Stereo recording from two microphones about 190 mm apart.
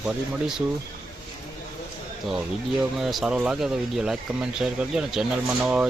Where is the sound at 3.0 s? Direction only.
Centre (ahead or behind).